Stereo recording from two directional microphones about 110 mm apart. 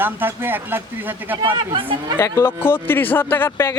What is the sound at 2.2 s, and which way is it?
Speech, 25° left (ahead or behind).